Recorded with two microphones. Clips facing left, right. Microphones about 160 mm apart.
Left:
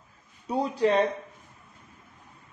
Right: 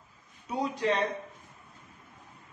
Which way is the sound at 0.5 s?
30° left (ahead or behind).